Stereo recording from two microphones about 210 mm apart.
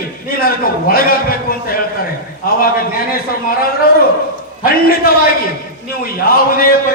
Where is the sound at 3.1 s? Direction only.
45° left (ahead or behind).